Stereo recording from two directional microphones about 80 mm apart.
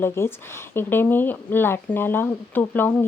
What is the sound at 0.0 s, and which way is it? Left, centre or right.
Speech, left.